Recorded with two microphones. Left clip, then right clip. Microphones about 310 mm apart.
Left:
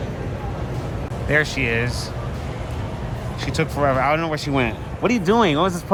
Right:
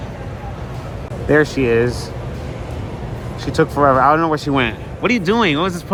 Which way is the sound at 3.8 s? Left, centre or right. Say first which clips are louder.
Right 6 dB; left.